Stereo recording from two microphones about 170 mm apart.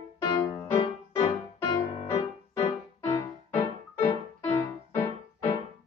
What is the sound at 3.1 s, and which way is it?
Music, 15° left (ahead or behind).